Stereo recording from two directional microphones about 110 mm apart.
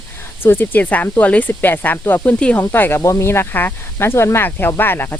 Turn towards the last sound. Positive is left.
turn(degrees=20)  # may be behind; listen again after turning